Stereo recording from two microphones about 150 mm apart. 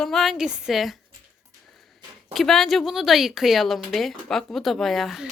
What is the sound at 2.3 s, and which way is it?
Speech, centre (ahead or behind).